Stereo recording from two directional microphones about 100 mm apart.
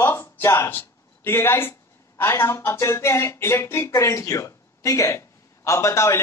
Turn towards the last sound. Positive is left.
turn(degrees=30)  # may be behind; listen again after turning